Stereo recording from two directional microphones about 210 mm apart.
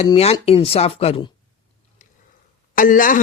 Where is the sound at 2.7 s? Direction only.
40° left (ahead or behind).